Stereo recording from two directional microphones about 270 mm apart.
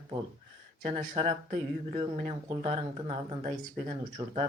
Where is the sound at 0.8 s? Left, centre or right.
Right.